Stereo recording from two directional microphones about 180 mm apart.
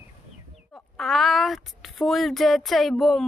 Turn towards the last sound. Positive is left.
turn(degrees=0)  # may be behind; listen again after turning